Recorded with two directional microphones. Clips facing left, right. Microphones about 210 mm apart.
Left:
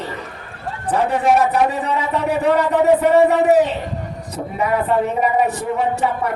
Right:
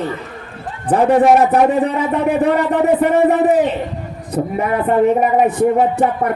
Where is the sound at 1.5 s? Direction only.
55° right (ahead or behind).